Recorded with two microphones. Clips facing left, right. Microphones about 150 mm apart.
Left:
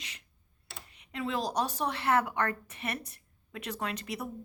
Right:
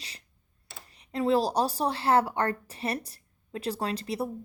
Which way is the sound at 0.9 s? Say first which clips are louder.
Right 10 dB; 35° right (ahead or behind).